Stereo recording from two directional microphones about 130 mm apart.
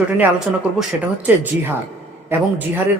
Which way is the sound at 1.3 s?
10° right (ahead or behind).